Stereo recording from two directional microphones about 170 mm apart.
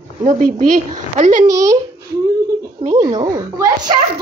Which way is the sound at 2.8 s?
40° right (ahead or behind).